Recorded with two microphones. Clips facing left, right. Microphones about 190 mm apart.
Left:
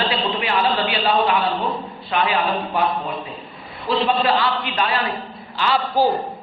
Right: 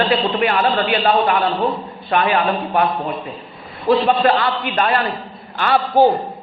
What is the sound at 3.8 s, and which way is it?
A man's voice, 55° right (ahead or behind).